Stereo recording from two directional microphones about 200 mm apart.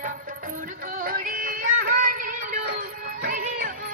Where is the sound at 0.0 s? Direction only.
40° right (ahead or behind).